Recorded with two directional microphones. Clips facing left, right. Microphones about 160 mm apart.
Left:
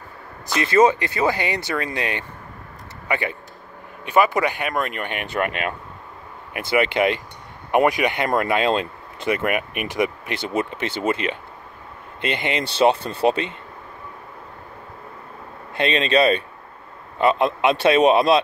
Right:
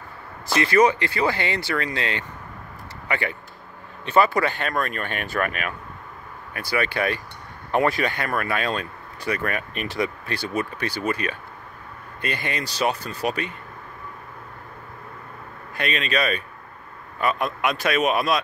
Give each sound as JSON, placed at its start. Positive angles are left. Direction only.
{"t": 0.6, "sound": "speech", "side_deg": 25}
{"t": 15.7, "sound": "speech", "side_deg": 25}